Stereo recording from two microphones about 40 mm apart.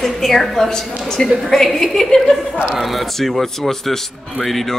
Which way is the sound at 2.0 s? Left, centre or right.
Centre.